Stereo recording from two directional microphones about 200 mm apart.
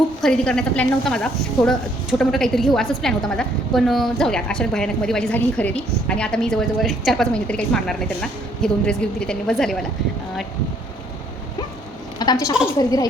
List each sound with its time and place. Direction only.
0.2 s a woman's voice: 5° left (ahead or behind)
12.2 s a woman's voice: 20° left (ahead or behind)